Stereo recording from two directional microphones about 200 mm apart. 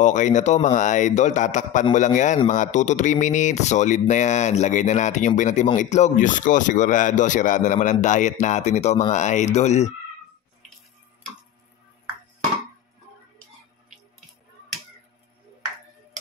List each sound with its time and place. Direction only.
0.0 s speech: 40° left (ahead or behind)